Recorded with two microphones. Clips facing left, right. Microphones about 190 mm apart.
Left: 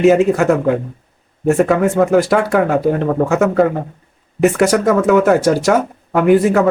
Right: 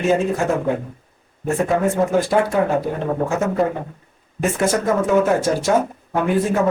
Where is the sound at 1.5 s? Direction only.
70° left (ahead or behind).